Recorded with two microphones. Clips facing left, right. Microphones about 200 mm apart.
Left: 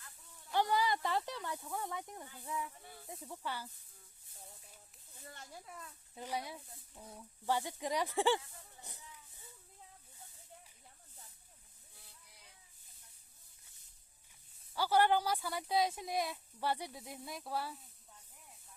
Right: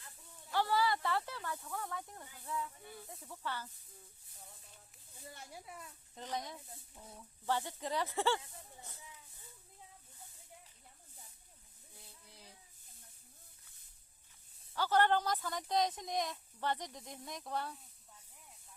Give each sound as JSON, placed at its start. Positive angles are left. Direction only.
{"t": 0.5, "sound": "speech", "side_deg": 15}
{"t": 5.3, "sound": "speech", "side_deg": -10}
{"t": 6.1, "sound": "speech", "side_deg": 10}
{"t": 11.9, "sound": "a sound", "side_deg": -30}
{"t": 14.7, "sound": "speech", "side_deg": 10}